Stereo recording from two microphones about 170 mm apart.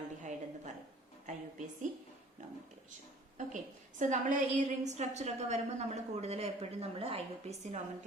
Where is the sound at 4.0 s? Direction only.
50° right (ahead or behind).